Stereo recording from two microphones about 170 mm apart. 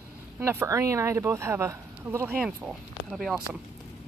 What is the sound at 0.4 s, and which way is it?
Speech, 15° right (ahead or behind).